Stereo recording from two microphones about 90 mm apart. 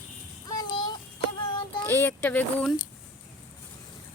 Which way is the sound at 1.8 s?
25° left (ahead or behind).